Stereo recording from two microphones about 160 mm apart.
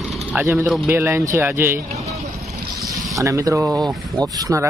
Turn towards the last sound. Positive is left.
turn(degrees=-20)  # may be behind; listen again after turning